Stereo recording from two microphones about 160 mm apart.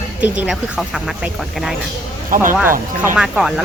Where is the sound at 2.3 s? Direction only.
55° right (ahead or behind).